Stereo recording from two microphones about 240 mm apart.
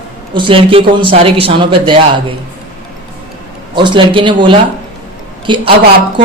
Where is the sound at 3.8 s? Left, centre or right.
Right.